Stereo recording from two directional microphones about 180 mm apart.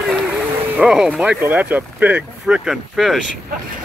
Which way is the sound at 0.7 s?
5° right (ahead or behind).